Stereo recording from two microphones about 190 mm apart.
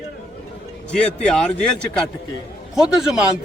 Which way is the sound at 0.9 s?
5° left (ahead or behind).